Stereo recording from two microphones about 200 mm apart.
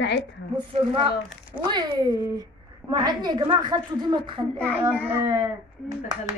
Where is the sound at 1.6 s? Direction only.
20° right (ahead or behind).